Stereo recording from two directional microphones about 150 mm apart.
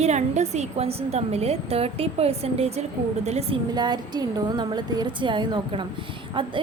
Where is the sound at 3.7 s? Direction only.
30° right (ahead or behind).